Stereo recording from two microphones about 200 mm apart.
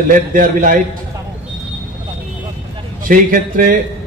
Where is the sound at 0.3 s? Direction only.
45° right (ahead or behind).